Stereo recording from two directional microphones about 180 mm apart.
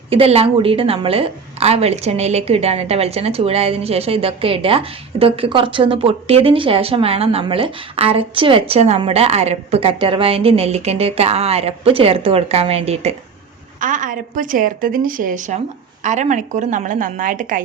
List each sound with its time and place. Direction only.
0.1 s a woman's voice: 35° right (ahead or behind)
13.7 s a woman's voice: 45° right (ahead or behind)